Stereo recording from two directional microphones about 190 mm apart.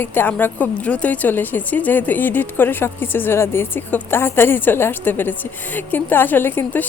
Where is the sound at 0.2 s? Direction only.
10° left (ahead or behind).